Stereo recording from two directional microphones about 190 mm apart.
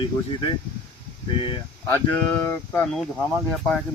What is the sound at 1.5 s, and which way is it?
Speech, 20° left (ahead or behind).